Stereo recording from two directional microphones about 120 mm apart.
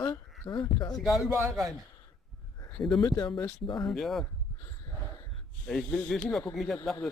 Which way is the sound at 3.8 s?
Centre (ahead or behind).